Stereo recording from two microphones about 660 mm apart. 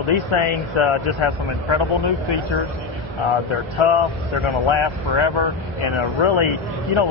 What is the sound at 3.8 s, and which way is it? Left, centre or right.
Speech, left.